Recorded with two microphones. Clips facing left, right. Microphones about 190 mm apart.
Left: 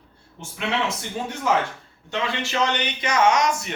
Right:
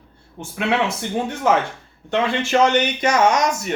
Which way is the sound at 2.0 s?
50° right (ahead or behind).